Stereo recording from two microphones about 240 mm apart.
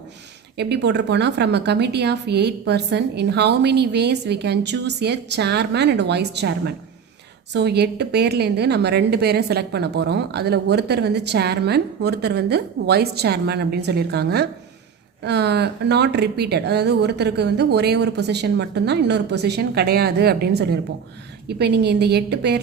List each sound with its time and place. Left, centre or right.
0.5 s a woman's voice: right